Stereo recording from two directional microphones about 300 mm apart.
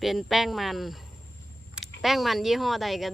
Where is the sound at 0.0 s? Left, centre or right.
Centre.